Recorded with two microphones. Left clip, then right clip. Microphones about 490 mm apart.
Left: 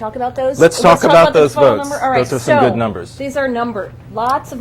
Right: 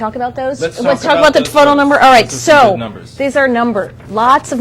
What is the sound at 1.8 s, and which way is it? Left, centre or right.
Speech, right.